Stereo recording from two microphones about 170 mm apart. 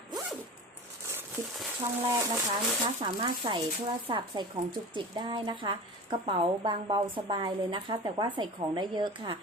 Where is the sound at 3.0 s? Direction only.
30° right (ahead or behind).